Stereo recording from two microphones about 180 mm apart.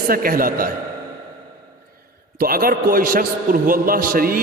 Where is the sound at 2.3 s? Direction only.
55° right (ahead or behind).